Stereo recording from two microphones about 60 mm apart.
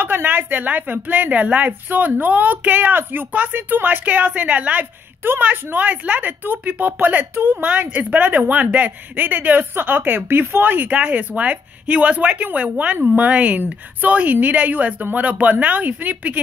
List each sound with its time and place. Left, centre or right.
0.0 s speech: right